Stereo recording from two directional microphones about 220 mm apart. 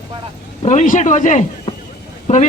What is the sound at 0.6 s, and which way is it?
Speech, 35° left (ahead or behind).